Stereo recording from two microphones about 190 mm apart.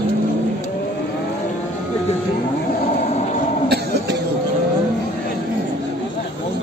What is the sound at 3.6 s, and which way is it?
Cough, 60° right (ahead or behind).